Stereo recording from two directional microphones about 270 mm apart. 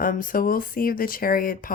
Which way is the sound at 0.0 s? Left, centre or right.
Left.